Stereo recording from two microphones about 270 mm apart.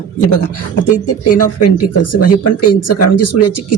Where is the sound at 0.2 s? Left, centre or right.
Left.